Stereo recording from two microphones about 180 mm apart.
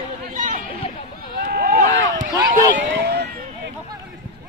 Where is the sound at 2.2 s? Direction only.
50° right (ahead or behind).